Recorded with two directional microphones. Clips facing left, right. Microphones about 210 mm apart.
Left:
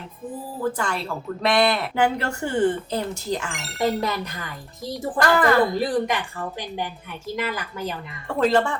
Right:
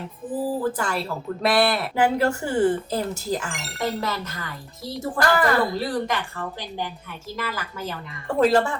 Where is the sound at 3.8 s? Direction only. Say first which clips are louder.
Left 4 dB; 15° left (ahead or behind).